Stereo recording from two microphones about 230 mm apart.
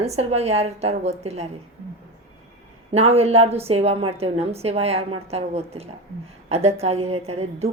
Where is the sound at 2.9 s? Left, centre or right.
Right.